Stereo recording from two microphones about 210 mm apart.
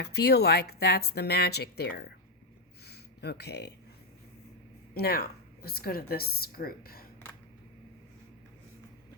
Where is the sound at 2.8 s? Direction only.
50° left (ahead or behind).